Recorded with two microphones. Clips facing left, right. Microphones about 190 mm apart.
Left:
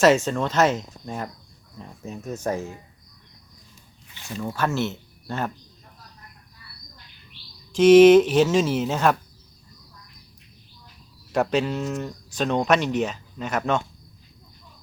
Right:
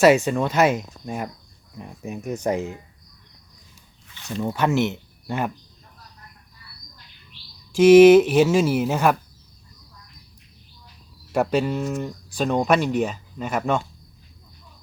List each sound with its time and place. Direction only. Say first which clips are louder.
0.0 s speech: right 2 dB; 10° right (ahead or behind)
4.4 s speech: right 4 dB; 20° right (ahead or behind)
7.7 s speech: right 1 dB; 10° right (ahead or behind)
11.3 s speech: right 1 dB; 10° right (ahead or behind)